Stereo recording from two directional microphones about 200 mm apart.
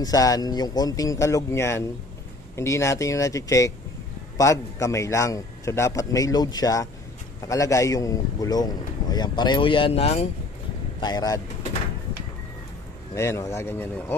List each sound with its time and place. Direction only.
0.0 s a man's voice: 20° left (ahead or behind)
13.1 s a man's voice: 15° left (ahead or behind)